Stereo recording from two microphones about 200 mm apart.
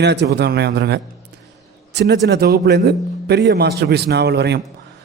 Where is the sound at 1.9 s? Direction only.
60° right (ahead or behind).